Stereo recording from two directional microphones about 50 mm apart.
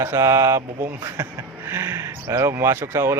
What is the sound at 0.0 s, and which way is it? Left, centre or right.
Speech, right.